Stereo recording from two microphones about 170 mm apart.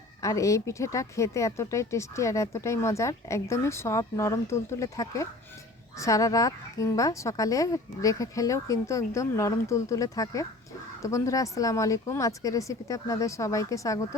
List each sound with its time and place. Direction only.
0.2 s a woman's voice: 20° left (ahead or behind)